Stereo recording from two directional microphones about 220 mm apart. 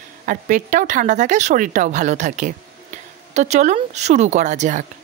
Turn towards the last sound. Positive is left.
turn(degrees=-35)  # may be behind; listen again after turning